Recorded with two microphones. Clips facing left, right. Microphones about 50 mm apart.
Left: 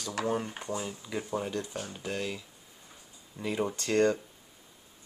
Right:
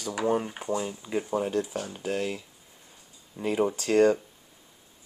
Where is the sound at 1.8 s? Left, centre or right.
Centre.